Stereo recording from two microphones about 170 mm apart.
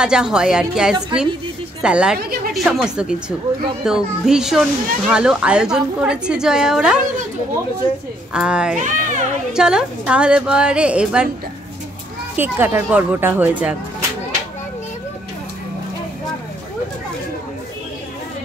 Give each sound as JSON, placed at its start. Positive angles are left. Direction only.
{"t": 0.0, "sound": "speech", "side_deg": -5}
{"t": 8.3, "sound": "speech", "side_deg": -5}
{"t": 8.7, "sound": "speech", "side_deg": -45}
{"t": 9.5, "sound": "speech", "side_deg": -5}
{"t": 12.4, "sound": "speech", "side_deg": -10}